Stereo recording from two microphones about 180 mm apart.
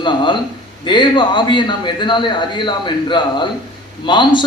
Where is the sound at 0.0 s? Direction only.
25° left (ahead or behind).